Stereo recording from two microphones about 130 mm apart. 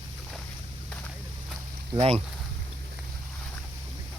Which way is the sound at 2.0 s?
50° right (ahead or behind).